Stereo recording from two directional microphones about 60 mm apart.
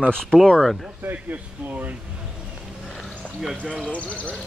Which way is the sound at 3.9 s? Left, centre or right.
Left.